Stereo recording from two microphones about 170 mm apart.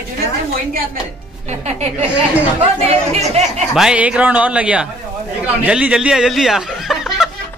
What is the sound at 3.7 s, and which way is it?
Speech, 5° right (ahead or behind).